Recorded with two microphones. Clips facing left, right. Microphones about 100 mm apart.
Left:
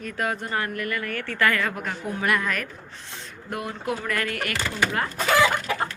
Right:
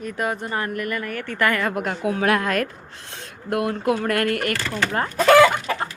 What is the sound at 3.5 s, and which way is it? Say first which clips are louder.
Speech: right 8 dB; 60° right (ahead or behind).